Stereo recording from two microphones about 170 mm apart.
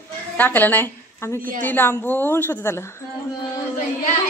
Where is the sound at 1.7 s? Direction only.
10° left (ahead or behind).